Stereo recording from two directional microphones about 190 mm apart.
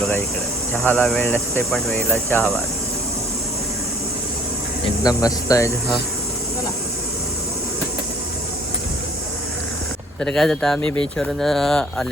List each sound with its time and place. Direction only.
0.8 s speech: 5° left (ahead or behind)
5.0 s speech: 20° left (ahead or behind)
10.2 s speech: centre (ahead or behind)